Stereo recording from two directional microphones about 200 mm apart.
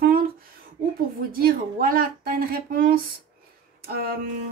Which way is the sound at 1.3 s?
45° right (ahead or behind).